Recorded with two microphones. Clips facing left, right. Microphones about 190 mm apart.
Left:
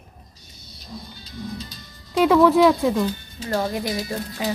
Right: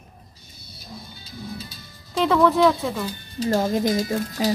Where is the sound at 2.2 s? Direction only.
5° left (ahead or behind).